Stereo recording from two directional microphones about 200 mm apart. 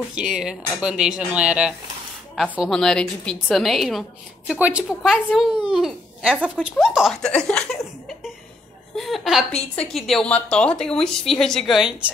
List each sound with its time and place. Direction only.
0.1 s a child's voice: 5° right (ahead or behind)